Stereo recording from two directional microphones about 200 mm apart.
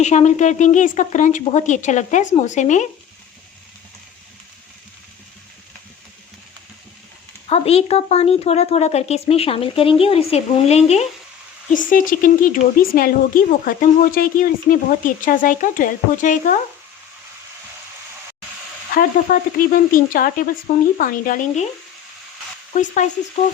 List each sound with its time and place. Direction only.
0.0 s speech: 35° left (ahead or behind)
7.5 s speech: 30° left (ahead or behind)
18.9 s speech: 45° left (ahead or behind)